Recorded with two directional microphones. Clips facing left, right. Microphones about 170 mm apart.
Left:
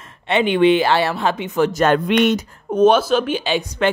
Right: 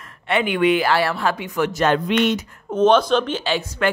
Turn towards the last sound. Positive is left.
turn(degrees=15)  # may be behind; listen again after turning